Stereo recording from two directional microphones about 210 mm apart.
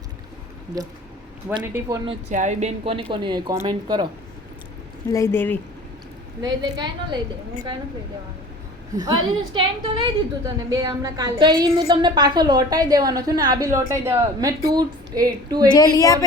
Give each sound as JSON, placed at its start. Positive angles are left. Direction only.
{"t": 0.7, "sound": "speech", "side_deg": -15}
{"t": 2.0, "sound": "a woman's voice", "side_deg": -35}
{"t": 5.0, "sound": "a woman's voice", "side_deg": 15}
{"t": 6.4, "sound": "a woman's voice", "side_deg": -20}
{"t": 9.0, "sound": "a woman's voice", "side_deg": -20}
{"t": 15.7, "sound": "a woman's voice", "side_deg": 20}